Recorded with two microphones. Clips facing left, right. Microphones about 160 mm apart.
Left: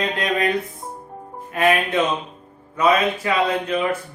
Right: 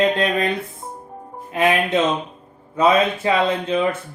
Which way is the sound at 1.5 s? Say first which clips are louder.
Right 1 dB; 20° right (ahead or behind).